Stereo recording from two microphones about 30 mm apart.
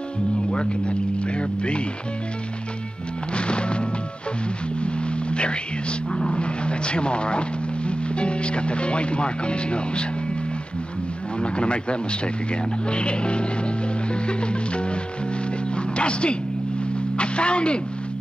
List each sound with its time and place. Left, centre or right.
0.5 s speech: left
3.3 s music: left
5.3 s speech: left
11.3 s speech: left
15.7 s music: left
17.2 s speech: left